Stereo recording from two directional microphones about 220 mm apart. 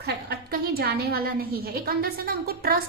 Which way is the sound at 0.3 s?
45° right (ahead or behind).